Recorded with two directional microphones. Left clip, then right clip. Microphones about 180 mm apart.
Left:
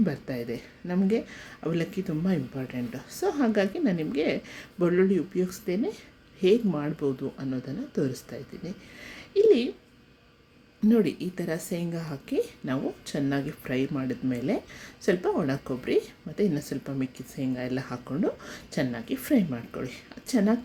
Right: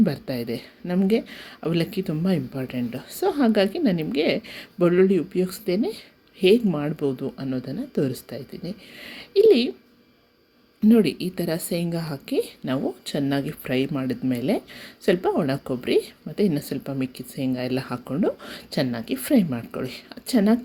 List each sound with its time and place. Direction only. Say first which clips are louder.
0.0 s a woman's voice: right 5 dB; 25° right (ahead or behind)
10.8 s a woman's voice: right 5 dB; 20° right (ahead or behind)